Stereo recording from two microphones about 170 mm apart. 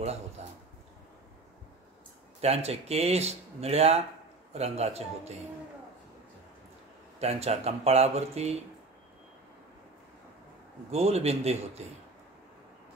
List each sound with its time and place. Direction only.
0.4 s speech: 40° right (ahead or behind)
2.4 s speech: 35° right (ahead or behind)
7.2 s speech: 40° right (ahead or behind)
10.9 s speech: 40° right (ahead or behind)